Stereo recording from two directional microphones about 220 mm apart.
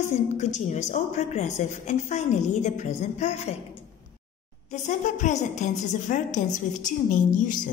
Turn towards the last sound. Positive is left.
turn(degrees=35)  # may be behind; listen again after turning